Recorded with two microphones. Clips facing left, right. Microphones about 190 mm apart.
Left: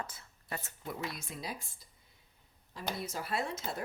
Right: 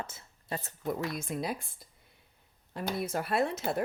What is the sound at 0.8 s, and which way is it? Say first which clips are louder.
Speech: right 8 dB; 50° right (ahead or behind).